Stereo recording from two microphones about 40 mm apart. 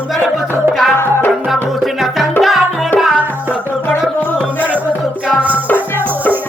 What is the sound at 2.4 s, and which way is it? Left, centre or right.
Tabla, centre.